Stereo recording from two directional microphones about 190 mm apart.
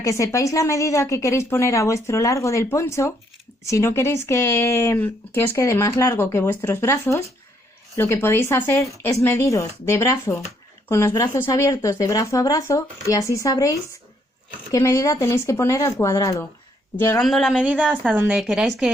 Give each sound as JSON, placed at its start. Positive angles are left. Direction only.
{"t": 0.0, "sound": "a woman's voice", "side_deg": 15}
{"t": 17.2, "sound": "a woman's voice", "side_deg": 0}